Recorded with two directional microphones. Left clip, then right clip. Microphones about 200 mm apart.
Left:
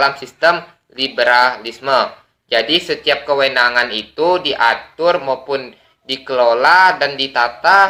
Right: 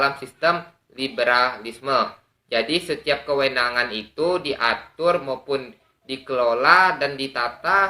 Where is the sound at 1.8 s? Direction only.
15° right (ahead or behind).